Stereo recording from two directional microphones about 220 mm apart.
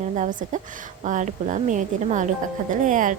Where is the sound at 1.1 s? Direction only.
35° right (ahead or behind).